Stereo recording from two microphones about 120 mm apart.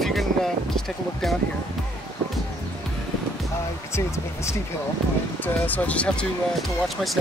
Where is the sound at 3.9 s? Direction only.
25° left (ahead or behind).